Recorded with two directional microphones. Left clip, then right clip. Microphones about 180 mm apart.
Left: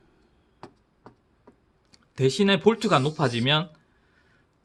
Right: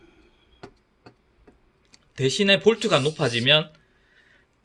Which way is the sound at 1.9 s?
60° left (ahead or behind).